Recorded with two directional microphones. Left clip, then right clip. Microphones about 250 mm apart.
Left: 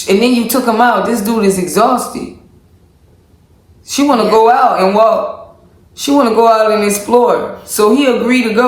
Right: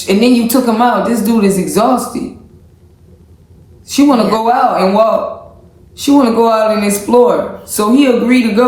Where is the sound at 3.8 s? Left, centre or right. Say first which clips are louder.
Right 1 dB; centre.